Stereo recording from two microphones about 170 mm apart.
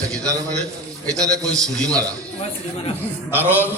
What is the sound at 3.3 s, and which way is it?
Speech, 10° right (ahead or behind).